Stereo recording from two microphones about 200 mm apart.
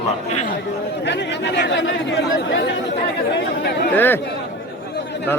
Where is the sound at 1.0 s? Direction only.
60° left (ahead or behind).